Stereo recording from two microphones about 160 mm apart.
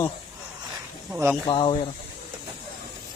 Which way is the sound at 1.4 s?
30° left (ahead or behind).